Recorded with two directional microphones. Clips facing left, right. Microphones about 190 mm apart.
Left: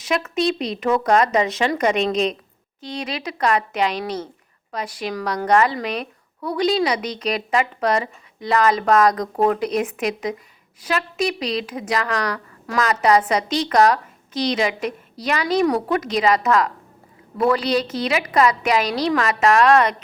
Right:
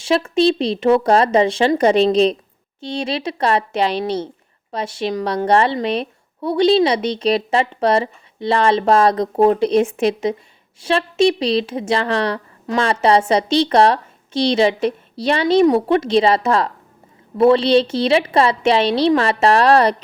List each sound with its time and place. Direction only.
0.0 s a woman's voice: 30° right (ahead or behind)